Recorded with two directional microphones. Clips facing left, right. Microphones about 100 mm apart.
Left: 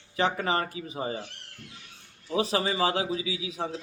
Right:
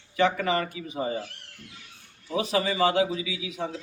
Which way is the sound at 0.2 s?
35° left (ahead or behind).